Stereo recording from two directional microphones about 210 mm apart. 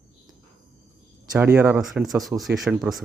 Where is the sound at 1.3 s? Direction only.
10° right (ahead or behind).